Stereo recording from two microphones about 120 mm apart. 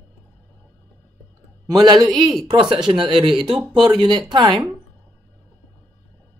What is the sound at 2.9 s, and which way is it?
A woman's voice, 45° right (ahead or behind).